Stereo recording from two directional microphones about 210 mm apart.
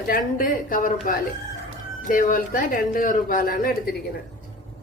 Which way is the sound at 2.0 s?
40° left (ahead or behind).